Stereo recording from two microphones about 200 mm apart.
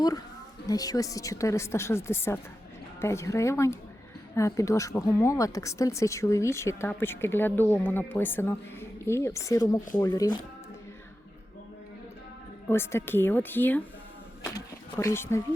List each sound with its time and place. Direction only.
0.7 s speech: 20° left (ahead or behind)
12.6 s speech: 10° left (ahead or behind)
14.4 s a sound: 15° left (ahead or behind)